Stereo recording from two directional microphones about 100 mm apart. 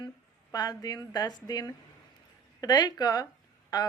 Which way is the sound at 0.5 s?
40° left (ahead or behind).